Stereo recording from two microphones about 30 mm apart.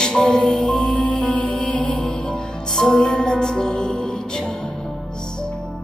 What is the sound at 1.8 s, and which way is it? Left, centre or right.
Music, left.